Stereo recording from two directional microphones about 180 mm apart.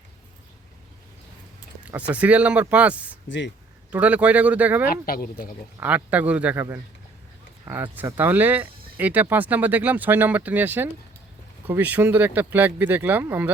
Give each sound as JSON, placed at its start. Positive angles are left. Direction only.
{"t": 1.8, "sound": "speech", "side_deg": -5}
{"t": 3.2, "sound": "speech", "side_deg": 85}
{"t": 3.9, "sound": "speech", "side_deg": -5}
{"t": 4.9, "sound": "speech", "side_deg": 55}
{"t": 5.8, "sound": "speech", "side_deg": -10}